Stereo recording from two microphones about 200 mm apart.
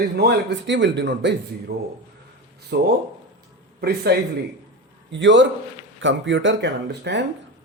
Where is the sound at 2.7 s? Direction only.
55° right (ahead or behind).